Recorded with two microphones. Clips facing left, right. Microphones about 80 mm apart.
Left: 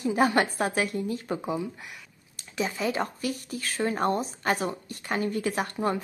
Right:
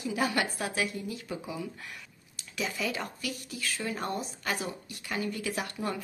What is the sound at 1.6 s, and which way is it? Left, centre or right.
Speech, centre.